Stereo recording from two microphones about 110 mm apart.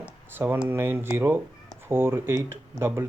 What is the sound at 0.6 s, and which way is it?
Speech, 20° right (ahead or behind).